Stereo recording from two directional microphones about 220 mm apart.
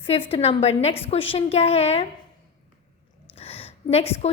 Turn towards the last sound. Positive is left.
turn(degrees=25)  # may be behind; listen again after turning